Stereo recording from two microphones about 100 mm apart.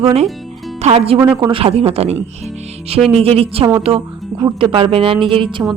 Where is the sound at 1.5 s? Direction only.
65° right (ahead or behind); by 2.2 s 90° right.